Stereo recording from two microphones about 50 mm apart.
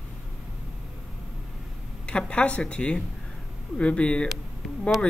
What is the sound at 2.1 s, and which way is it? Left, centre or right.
Speech, centre.